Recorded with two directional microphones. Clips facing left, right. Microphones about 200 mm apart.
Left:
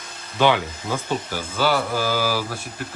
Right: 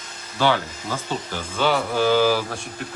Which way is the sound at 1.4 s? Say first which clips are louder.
Right 1 dB; 5° left (ahead or behind).